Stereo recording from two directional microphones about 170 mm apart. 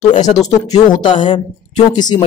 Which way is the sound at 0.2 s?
20° left (ahead or behind).